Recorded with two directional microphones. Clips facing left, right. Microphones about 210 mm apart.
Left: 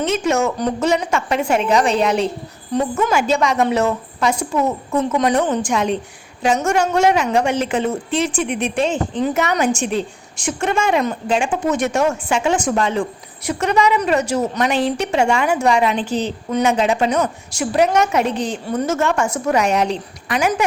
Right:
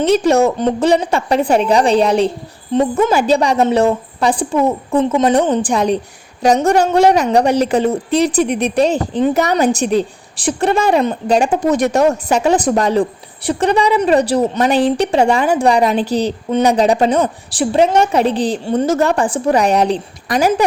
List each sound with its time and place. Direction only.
0.0 s a woman's voice: 35° right (ahead or behind)